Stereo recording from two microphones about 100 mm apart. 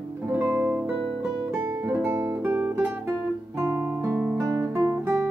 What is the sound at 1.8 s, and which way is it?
Guitar, 25° right (ahead or behind).